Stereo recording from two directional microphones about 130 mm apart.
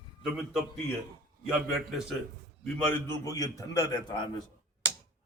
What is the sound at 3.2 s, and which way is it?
A man's voice, 25° left (ahead or behind).